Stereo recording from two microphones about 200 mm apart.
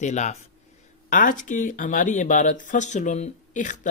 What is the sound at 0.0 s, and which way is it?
Speech, 35° left (ahead or behind).